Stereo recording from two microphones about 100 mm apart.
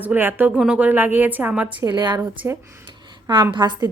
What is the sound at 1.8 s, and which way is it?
Speech, 45° right (ahead or behind).